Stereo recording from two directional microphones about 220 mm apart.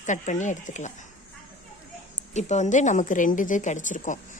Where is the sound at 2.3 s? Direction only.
30° left (ahead or behind).